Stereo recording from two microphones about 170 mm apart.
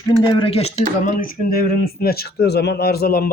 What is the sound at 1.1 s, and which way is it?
Speech, 55° left (ahead or behind).